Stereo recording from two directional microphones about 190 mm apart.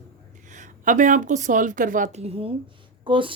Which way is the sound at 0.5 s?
40° right (ahead or behind).